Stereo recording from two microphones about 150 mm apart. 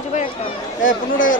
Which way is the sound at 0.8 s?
60° left (ahead or behind).